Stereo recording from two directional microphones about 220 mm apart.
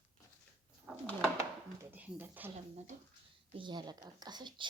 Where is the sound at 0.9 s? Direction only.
5° left (ahead or behind).